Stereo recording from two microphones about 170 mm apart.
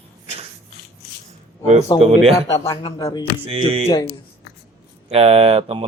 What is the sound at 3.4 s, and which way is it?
Speech, 35° right (ahead or behind).